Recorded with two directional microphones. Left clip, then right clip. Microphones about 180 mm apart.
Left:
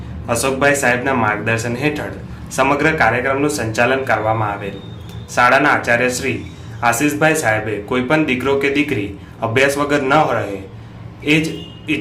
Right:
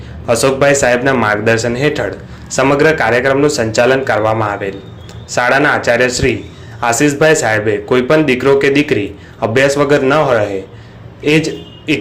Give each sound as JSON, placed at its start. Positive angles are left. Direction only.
{"t": 0.3, "sound": "a man's voice", "side_deg": -30}